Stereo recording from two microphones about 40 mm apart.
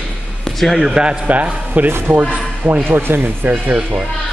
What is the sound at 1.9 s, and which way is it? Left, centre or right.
Speech, right.